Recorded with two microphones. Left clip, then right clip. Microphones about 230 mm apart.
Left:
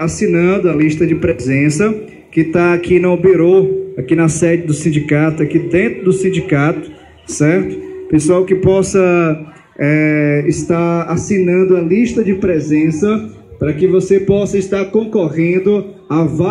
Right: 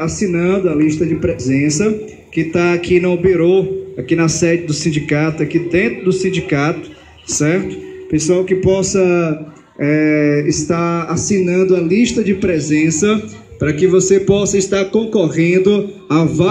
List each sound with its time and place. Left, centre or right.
0.0 s a man's voice: left; by 16.4 s right